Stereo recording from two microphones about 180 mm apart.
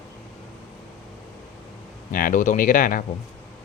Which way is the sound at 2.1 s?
50° left (ahead or behind).